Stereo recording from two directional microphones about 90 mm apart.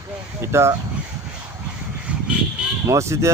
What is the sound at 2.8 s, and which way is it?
Speech, 35° right (ahead or behind).